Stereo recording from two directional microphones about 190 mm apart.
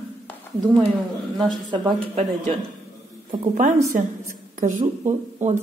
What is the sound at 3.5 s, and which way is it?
A woman's voice, 40° right (ahead or behind).